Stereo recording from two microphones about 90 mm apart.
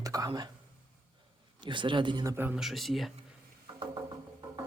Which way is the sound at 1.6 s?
65° right (ahead or behind).